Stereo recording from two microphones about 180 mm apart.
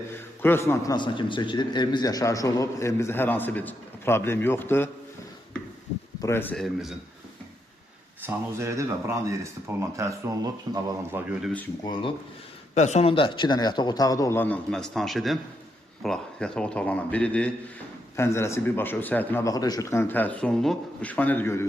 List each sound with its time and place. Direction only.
0.4 s a man's voice: 15° left (ahead or behind)
6.2 s a man's voice: 10° left (ahead or behind)
8.2 s speech: 15° right (ahead or behind)
12.7 s a man's voice: 40° left (ahead or behind); by 21.6 s 10° left (ahead or behind)